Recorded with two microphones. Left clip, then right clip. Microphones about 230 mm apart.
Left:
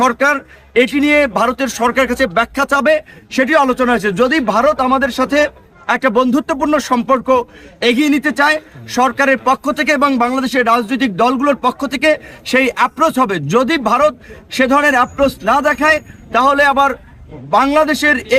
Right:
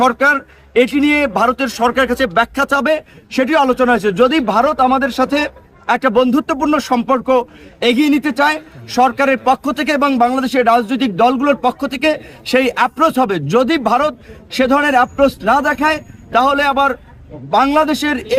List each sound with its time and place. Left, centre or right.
0.0 s a man's voice: centre